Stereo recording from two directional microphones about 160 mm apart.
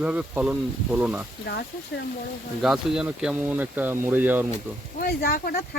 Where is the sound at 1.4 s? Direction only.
90° left.